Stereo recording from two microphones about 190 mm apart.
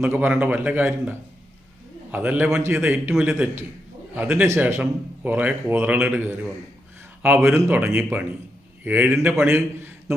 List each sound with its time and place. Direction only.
0.0 s a man's voice: 10° right (ahead or behind)
2.1 s a man's voice: 10° right (ahead or behind)